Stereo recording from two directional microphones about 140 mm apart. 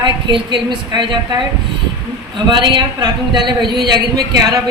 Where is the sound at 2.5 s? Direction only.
35° right (ahead or behind).